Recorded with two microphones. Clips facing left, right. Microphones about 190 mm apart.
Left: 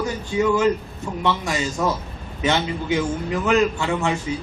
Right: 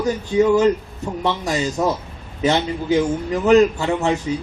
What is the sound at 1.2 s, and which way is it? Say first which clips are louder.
A man's voice: right 2 dB; 35° right (ahead or behind).